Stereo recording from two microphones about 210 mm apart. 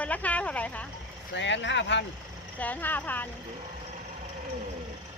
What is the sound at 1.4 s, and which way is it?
Speech, 60° left (ahead or behind).